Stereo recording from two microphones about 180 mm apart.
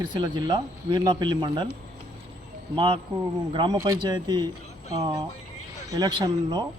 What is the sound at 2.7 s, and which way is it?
Speech, 25° right (ahead or behind).